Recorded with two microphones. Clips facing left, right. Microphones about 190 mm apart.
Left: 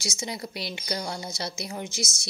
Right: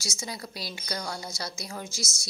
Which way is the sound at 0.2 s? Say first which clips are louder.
Left 4 dB; 25° left (ahead or behind).